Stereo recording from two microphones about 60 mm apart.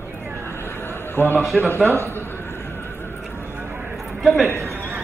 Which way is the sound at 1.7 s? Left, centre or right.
Left.